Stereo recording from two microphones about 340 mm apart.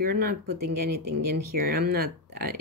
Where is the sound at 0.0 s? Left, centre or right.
Right.